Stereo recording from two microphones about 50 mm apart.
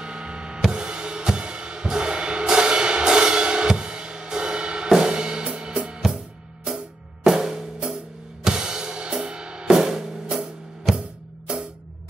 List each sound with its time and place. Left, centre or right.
0.0 s music: centre
7.2 s drum kit: centre
8.5 s music: centre